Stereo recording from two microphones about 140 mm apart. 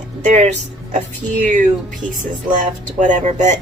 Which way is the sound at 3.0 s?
60° right (ahead or behind).